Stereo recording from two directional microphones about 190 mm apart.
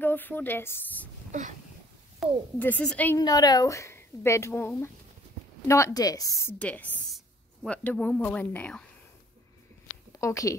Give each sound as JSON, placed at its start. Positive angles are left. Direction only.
{"t": 0.0, "sound": "a woman's voice", "side_deg": 10}
{"t": 1.3, "sound": "speech", "side_deg": -40}
{"t": 2.6, "sound": "speech", "side_deg": 5}
{"t": 3.2, "sound": "speech", "side_deg": 20}
{"t": 10.1, "sound": "a woman's voice", "side_deg": 15}